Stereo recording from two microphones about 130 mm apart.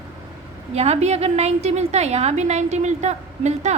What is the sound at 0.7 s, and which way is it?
A woman's voice, 55° right (ahead or behind).